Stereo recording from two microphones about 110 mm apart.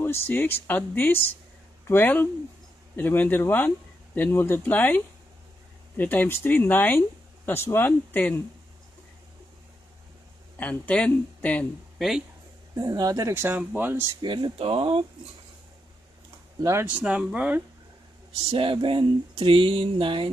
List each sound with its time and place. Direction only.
0.0 s speech: 20° left (ahead or behind)
10.6 s speech: 15° left (ahead or behind)
12.7 s speech: 35° right (ahead or behind)
13.3 s speech: 20° right (ahead or behind)
14.2 s a sound: 45° right (ahead or behind)
14.6 s speech: 60° right (ahead or behind)
16.8 s speech: 10° right (ahead or behind)
18.5 s a sound: 55° right (ahead or behind)